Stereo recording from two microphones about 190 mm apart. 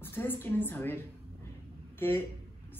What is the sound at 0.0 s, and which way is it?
A woman's voice, 10° left (ahead or behind).